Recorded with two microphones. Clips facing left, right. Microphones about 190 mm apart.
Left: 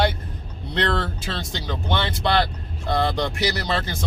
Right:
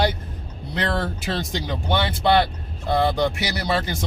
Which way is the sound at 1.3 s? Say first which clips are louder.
Right 3 dB; 15° right (ahead or behind).